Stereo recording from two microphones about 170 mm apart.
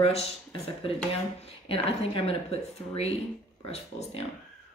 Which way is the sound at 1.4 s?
35° left (ahead or behind).